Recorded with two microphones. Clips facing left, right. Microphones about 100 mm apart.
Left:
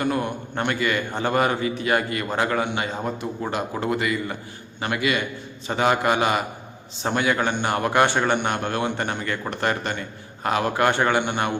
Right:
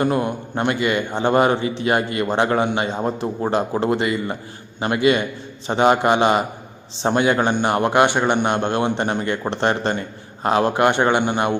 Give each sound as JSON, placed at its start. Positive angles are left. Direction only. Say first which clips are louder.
{"t": 0.0, "sound": "a man's voice", "louder": "right 4 dB", "side_deg": -30}